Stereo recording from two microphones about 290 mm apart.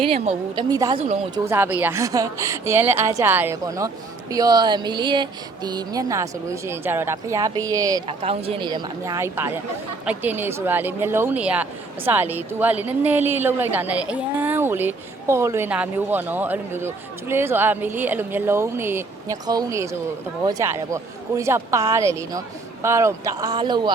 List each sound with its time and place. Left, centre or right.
0.0 s speech: centre